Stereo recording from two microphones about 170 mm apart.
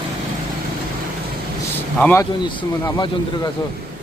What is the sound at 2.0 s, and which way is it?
Speech, 10° left (ahead or behind).